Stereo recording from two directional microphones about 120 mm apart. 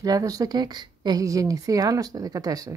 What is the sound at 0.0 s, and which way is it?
A woman's voice, 30° right (ahead or behind).